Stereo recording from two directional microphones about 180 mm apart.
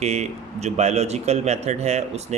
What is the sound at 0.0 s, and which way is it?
Speech, 35° right (ahead or behind).